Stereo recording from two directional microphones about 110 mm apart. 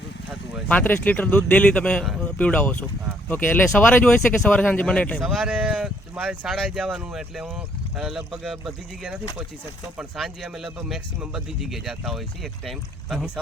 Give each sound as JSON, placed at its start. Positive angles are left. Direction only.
{"t": 0.7, "sound": "speech", "side_deg": 15}
{"t": 5.2, "sound": "speech", "side_deg": -5}